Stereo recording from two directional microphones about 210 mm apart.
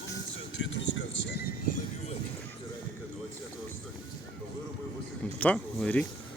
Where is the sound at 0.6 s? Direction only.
60° left (ahead or behind).